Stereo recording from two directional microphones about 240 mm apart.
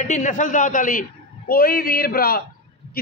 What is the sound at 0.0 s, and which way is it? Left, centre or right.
A man's voice, left.